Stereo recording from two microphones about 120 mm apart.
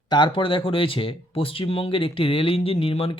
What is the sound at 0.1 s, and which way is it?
Speech, 40° left (ahead or behind).